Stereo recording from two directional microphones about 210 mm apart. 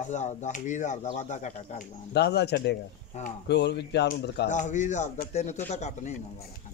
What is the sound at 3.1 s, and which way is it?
Speech, 30° left (ahead or behind).